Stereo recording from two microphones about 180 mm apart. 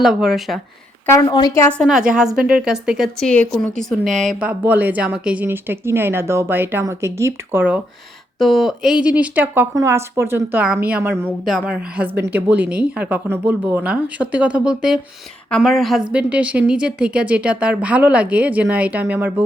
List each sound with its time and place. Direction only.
0.0 s speech: 5° right (ahead or behind)
1.0 s a woman's voice: 20° left (ahead or behind)
1.8 s a woman's voice: 5° right (ahead or behind)